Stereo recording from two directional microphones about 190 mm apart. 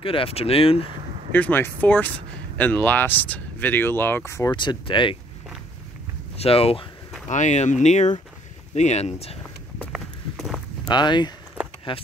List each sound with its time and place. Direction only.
0.0 s speech: 30° left (ahead or behind)
1.3 s speech: 10° left (ahead or behind); by 5.1 s 25° left (ahead or behind)
6.3 s speech: 30° left (ahead or behind)
9.8 s walk: centre (ahead or behind)
10.9 s speech: 25° left (ahead or behind)